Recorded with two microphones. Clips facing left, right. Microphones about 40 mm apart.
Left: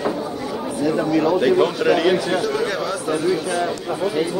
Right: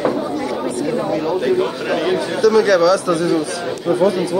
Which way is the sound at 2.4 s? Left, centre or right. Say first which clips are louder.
Right 9 dB; right.